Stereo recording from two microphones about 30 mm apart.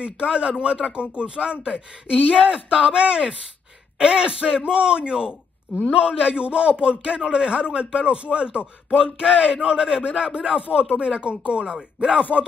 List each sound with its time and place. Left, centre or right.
0.0 s a man's voice: right
7.2 s a man's voice: right
11.6 s speech: right
12.1 s speech: right